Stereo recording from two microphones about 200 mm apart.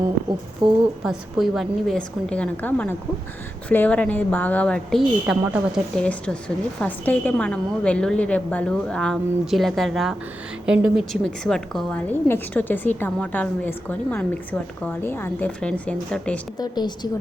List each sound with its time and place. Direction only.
0.6 s speech: 25° right (ahead or behind)
1.0 s a woman's voice: centre (ahead or behind)
16.6 s a woman's voice: 20° left (ahead or behind)